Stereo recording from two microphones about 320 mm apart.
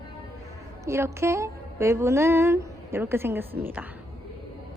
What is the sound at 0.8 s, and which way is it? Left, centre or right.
A woman's voice, centre.